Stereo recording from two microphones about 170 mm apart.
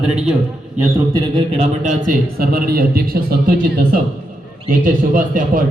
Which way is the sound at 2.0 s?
55° right (ahead or behind).